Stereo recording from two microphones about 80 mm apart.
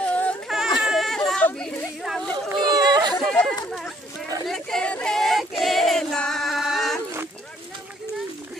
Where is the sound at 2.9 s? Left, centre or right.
Right.